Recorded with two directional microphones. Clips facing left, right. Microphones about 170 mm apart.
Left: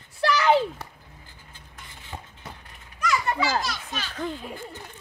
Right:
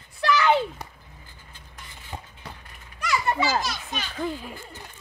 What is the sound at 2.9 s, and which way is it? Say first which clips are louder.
Children playing: even; 30° right (ahead or behind).